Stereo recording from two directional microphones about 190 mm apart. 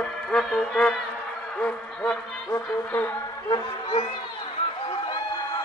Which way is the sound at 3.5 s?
25° left (ahead or behind).